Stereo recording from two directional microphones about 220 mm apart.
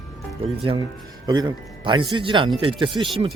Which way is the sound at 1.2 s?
20° right (ahead or behind).